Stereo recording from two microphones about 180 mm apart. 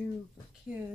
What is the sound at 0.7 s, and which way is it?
Speech, 5° right (ahead or behind).